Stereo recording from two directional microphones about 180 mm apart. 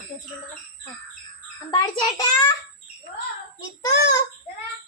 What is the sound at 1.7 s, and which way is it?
Speech, 20° left (ahead or behind).